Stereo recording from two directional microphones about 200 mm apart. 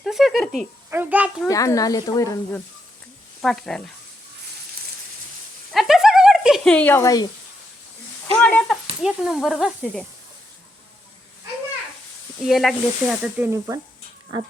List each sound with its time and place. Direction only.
0.0 s speech: centre (ahead or behind)
0.9 s a child's voice: 10° right (ahead or behind)
1.5 s speech: 15° left (ahead or behind)
3.4 s speech: centre (ahead or behind)
5.7 s a sound: centre (ahead or behind); by 7.3 s 15° left (ahead or behind)
8.4 s speech: 5° left (ahead or behind)
12.4 s speech: centre (ahead or behind)